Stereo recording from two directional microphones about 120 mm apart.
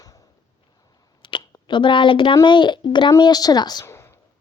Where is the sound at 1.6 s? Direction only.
40° left (ahead or behind).